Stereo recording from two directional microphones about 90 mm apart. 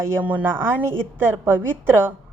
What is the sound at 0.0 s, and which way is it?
A woman's voice, 25° right (ahead or behind).